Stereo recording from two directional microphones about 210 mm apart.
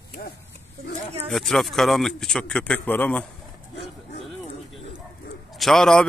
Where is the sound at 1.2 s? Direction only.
Centre (ahead or behind).